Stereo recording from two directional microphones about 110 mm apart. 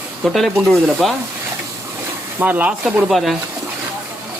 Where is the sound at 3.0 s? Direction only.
Centre (ahead or behind).